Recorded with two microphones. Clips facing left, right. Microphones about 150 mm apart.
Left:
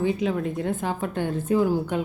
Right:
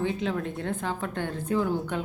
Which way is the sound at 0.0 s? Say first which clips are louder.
Left 4 dB; 5° left (ahead or behind).